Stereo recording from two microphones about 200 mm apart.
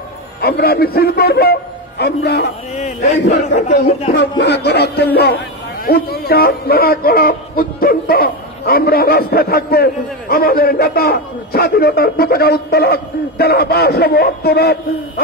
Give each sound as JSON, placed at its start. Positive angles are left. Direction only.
{"t": 0.4, "sound": "speech", "side_deg": 50}
{"t": 2.7, "sound": "a man's voice", "side_deg": 35}
{"t": 4.1, "sound": "speech", "side_deg": 60}